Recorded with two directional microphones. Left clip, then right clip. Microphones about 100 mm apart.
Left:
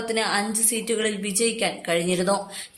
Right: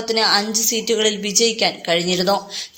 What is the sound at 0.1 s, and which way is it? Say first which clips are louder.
A woman's voice: right 8 dB; 30° right (ahead or behind).